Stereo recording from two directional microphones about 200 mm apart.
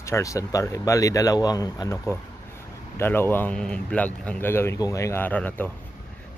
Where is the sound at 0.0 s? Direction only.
15° left (ahead or behind).